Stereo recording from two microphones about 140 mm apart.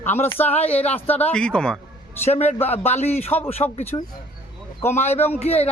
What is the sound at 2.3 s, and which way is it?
A man's voice, 50° left (ahead or behind).